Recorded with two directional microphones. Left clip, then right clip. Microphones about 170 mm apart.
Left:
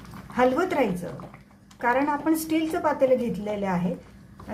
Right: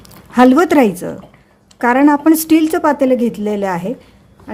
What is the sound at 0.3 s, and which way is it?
A woman's voice, 90° right.